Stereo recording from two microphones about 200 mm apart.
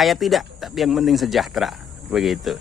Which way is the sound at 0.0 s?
Centre (ahead or behind).